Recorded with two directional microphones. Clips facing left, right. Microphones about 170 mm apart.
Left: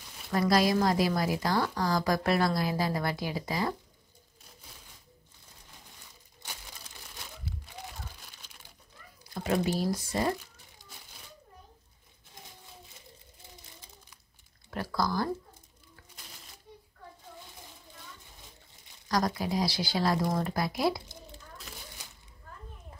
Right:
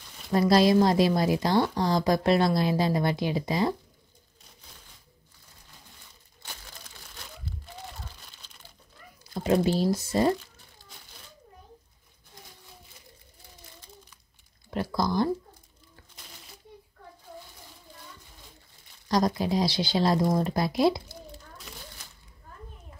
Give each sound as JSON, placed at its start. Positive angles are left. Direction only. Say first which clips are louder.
{"t": 0.3, "sound": "a woman's voice", "louder": "right 5 dB", "side_deg": -25}
{"t": 9.3, "sound": "a sound", "louder": "right 5 dB", "side_deg": -25}
{"t": 9.8, "sound": "a woman's voice", "louder": "right 5 dB", "side_deg": -25}
{"t": 10.8, "sound": "crumpling", "louder": "even", "side_deg": 15}
{"t": 14.7, "sound": "a woman's voice", "louder": "right 3 dB", "side_deg": -20}
{"t": 19.0, "sound": "a woman's voice", "louder": "right 4 dB", "side_deg": -25}